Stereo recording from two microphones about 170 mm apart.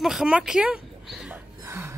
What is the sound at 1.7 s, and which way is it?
Gasp, 15° right (ahead or behind).